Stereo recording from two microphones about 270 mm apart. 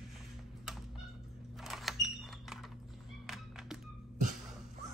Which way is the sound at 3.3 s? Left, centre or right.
Centre.